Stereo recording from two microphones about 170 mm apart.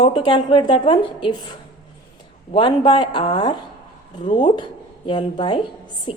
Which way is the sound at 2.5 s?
30° left (ahead or behind).